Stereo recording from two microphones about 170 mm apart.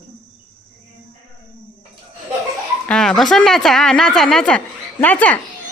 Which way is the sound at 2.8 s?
5° left (ahead or behind).